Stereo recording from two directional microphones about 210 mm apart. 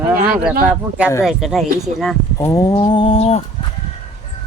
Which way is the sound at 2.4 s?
15° left (ahead or behind).